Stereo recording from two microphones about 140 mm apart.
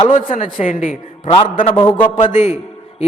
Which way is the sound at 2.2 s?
55° left (ahead or behind).